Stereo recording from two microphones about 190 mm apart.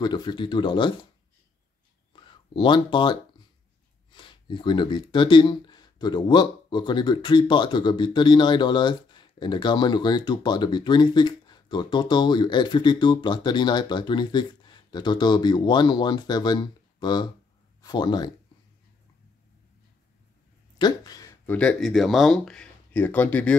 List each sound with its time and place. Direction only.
0.0 s speech: 25° left (ahead or behind)
2.1 s speech: 25° left (ahead or behind)
20.7 s a sound: 20° left (ahead or behind)
21.5 s speech: 5° left (ahead or behind)